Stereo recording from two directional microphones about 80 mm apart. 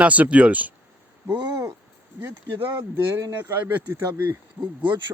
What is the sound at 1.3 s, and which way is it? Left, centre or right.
Speech, right.